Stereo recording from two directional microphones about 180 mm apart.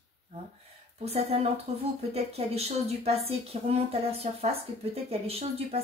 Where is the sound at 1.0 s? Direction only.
35° right (ahead or behind).